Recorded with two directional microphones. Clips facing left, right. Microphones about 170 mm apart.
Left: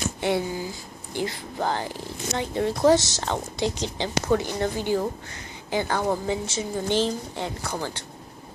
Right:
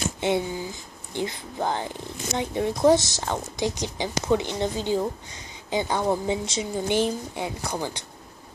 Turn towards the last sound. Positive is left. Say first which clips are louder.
# right 1 dB
turn(degrees=-15)  # may be behind; listen again after turning